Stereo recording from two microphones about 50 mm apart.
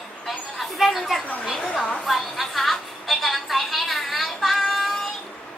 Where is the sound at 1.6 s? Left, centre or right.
Centre.